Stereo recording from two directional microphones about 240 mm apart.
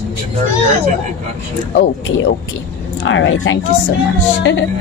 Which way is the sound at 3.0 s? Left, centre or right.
Left.